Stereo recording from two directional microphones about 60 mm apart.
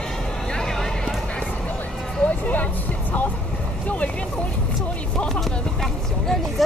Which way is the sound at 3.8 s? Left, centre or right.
Left.